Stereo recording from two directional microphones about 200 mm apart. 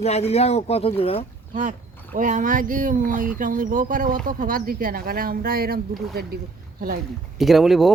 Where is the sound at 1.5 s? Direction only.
40° right (ahead or behind).